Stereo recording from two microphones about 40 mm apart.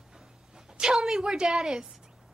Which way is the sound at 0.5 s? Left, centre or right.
Centre.